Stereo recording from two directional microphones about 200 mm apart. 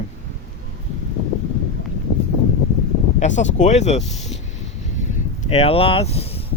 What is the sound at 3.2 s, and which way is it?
Speech, 35° left (ahead or behind).